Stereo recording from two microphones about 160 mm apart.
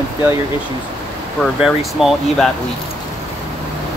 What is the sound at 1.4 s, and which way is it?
Speech, centre (ahead or behind).